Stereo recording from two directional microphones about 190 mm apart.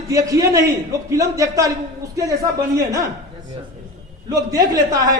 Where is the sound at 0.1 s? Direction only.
20° right (ahead or behind).